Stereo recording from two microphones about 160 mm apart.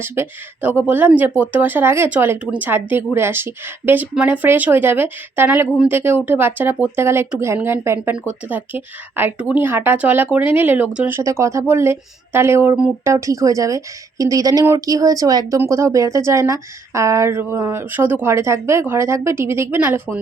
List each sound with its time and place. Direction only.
0.0 s a woman's voice: 10° right (ahead or behind)